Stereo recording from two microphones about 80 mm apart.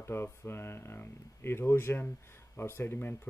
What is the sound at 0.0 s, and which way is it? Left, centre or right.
Speech, left.